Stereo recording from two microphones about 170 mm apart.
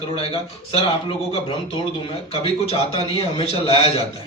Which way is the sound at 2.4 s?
35° left (ahead or behind).